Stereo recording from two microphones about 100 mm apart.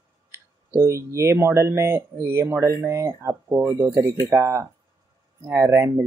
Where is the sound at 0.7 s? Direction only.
25° right (ahead or behind).